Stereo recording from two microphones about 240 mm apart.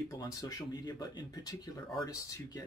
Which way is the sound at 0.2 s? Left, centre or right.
Centre.